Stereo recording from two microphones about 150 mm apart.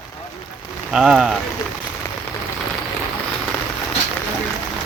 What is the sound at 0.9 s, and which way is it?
Speech, 5° right (ahead or behind).